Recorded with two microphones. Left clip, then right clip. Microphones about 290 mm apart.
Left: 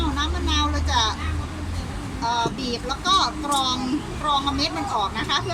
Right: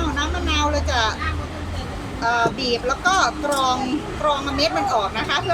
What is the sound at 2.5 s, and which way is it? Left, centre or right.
Speech, centre.